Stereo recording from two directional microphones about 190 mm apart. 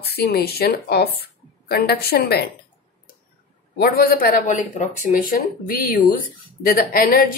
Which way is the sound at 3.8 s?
50° left (ahead or behind).